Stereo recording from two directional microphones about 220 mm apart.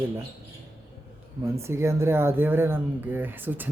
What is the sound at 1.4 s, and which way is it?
Speech, 10° right (ahead or behind).